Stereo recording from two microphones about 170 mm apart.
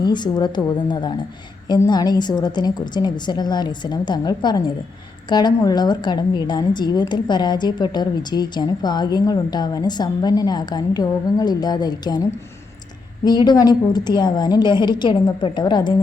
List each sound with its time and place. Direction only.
0.0 s a woman's voice: 25° left (ahead or behind)
13.2 s a woman's voice: 25° left (ahead or behind)